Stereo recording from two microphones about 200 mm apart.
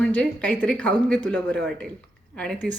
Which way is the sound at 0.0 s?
5° left (ahead or behind).